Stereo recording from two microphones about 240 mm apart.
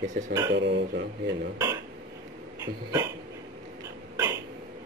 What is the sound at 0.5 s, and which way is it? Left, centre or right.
Speech, right.